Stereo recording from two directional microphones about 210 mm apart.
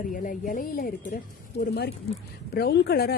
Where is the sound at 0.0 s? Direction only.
40° left (ahead or behind).